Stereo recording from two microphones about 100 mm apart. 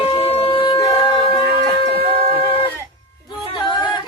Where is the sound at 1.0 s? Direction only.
55° left (ahead or behind).